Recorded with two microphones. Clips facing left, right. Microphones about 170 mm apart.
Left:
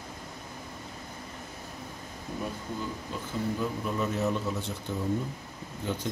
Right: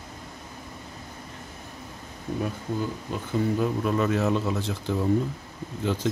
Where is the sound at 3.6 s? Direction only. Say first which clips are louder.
Right 6 dB; 75° right (ahead or behind).